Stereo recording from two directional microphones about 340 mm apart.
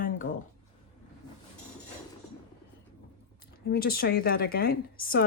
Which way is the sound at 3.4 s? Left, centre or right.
Left.